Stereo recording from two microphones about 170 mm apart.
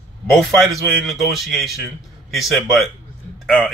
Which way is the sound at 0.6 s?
Centre (ahead or behind).